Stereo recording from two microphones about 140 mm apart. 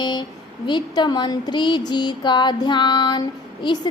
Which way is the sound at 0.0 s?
30° left (ahead or behind).